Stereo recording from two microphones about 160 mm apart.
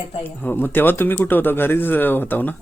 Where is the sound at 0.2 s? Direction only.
15° left (ahead or behind).